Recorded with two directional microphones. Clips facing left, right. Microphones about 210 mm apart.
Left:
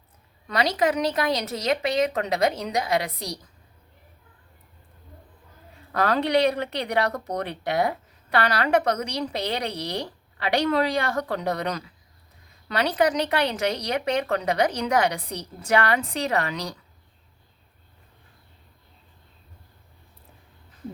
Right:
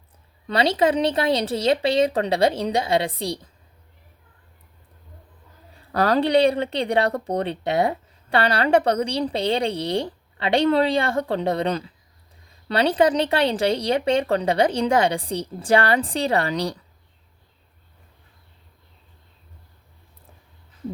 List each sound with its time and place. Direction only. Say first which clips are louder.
0.4 s speech: right 3 dB; 30° right (ahead or behind)
5.9 s speech: right 4 dB; 35° right (ahead or behind)